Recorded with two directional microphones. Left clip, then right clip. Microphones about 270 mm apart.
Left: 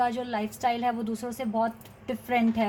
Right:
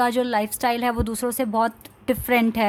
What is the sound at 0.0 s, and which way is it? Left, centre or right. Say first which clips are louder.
Speech: right 7 dB; right.